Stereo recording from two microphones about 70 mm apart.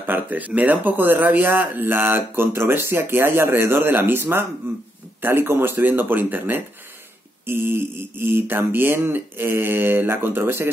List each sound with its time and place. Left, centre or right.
0.0 s speech: right